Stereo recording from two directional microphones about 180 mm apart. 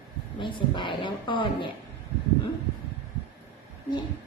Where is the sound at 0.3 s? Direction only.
25° left (ahead or behind).